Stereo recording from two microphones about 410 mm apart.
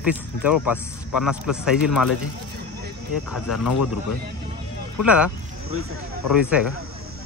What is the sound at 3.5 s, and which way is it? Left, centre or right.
Speech, left.